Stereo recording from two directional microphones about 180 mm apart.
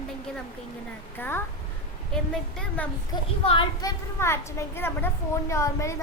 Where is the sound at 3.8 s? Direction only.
15° left (ahead or behind).